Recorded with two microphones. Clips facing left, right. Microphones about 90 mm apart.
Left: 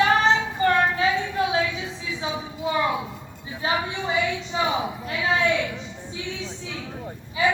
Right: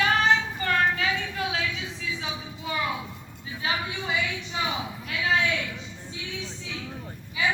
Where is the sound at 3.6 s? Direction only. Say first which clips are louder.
Left 4 dB; 35° left (ahead or behind).